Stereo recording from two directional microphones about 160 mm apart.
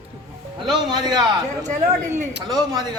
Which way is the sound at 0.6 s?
25° right (ahead or behind).